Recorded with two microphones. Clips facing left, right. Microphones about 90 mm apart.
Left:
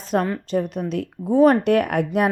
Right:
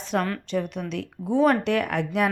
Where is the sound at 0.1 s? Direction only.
35° left (ahead or behind).